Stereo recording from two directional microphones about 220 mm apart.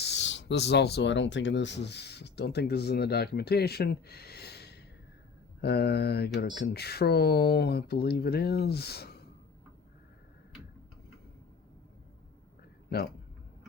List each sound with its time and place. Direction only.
0.0 s speech: 50° left (ahead or behind)